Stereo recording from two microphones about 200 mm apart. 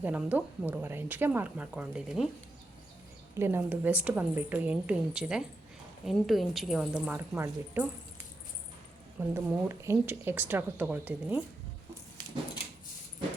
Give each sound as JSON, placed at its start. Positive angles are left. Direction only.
{"t": 0.0, "sound": "a woman's voice", "side_deg": -5}
{"t": 3.3, "sound": "a woman's voice", "side_deg": -10}
{"t": 9.3, "sound": "a woman's voice", "side_deg": -15}